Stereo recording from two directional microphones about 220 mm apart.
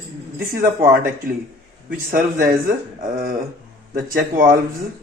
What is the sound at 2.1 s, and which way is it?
A man's voice, 40° right (ahead or behind).